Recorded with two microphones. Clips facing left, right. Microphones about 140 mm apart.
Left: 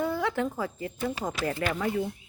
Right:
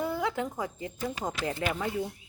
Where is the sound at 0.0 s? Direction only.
15° right (ahead or behind).